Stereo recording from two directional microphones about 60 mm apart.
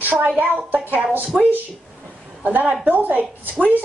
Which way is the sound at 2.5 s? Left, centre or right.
Right.